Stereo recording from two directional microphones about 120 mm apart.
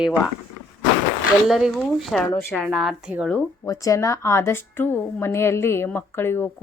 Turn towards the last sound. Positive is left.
turn(degrees=20)  # may be behind; listen again after turning